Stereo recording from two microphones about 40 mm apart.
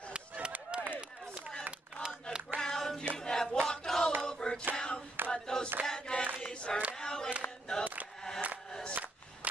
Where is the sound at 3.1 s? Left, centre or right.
Centre.